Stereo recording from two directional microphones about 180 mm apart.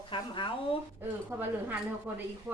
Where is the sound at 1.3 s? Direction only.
10° right (ahead or behind).